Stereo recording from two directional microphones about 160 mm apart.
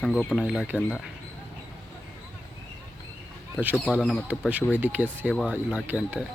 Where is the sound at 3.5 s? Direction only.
10° right (ahead or behind).